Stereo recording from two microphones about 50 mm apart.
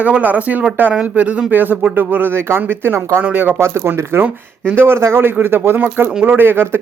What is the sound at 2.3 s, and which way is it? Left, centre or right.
Speech, right.